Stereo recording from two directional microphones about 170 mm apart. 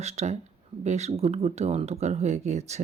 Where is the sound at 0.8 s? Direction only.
40° right (ahead or behind).